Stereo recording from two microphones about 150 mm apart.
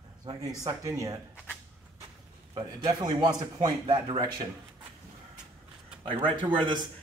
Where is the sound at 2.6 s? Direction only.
25° right (ahead or behind).